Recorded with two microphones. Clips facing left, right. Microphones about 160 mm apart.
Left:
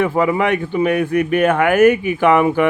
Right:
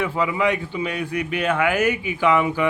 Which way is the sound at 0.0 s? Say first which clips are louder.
Left 5 dB; 50° left (ahead or behind).